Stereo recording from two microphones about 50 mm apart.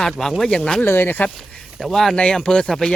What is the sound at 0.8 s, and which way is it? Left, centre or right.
Speech, left.